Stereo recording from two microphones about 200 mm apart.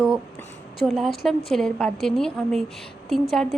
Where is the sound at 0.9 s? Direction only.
Centre (ahead or behind).